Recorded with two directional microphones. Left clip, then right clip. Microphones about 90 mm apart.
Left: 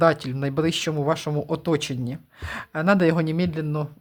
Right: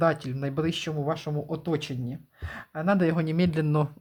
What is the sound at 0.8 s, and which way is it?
Speech, 55° left (ahead or behind).